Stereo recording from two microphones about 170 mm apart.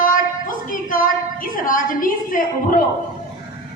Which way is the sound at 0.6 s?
55° left (ahead or behind).